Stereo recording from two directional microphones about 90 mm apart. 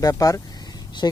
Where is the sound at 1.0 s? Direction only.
50° left (ahead or behind).